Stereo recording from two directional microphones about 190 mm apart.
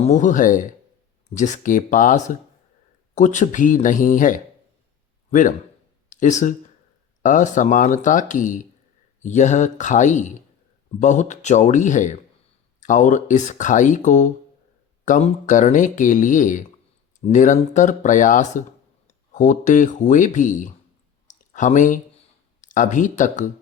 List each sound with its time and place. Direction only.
0.0 s speech: 40° left (ahead or behind)